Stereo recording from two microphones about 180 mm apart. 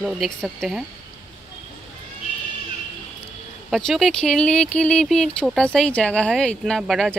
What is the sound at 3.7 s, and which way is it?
Speech, centre (ahead or behind).